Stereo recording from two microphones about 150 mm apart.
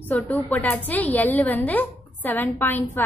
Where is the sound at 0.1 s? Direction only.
10° left (ahead or behind).